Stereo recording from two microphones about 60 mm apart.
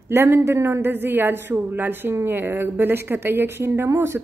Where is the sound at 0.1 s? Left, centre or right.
Right.